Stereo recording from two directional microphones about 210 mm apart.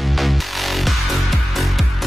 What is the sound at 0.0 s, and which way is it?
Music, centre (ahead or behind).